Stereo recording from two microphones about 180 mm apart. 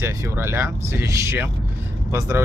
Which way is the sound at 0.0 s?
15° right (ahead or behind).